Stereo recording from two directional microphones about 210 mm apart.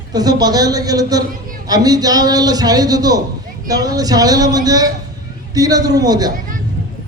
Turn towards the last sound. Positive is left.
turn(degrees=-20)  # may be behind; listen again after turning